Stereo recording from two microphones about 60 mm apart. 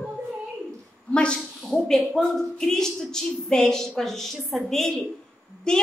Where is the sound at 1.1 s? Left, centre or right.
Centre.